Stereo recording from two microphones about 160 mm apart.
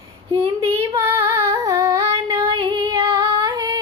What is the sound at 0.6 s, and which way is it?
Female singing, 20° right (ahead or behind).